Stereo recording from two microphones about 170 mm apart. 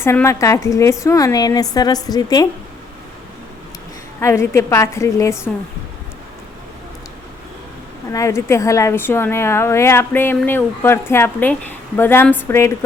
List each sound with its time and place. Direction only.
0.0 s a woman's voice: 15° left (ahead or behind)
4.2 s a woman's voice: 15° left (ahead or behind)
8.1 s a woman's voice: 15° left (ahead or behind)